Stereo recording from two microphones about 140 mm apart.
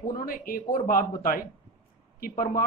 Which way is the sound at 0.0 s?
90° left.